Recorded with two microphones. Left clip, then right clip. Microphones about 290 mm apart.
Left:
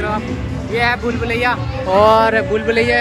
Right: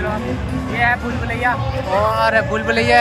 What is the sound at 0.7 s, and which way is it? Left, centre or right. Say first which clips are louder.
Speech: left 1 dB; centre.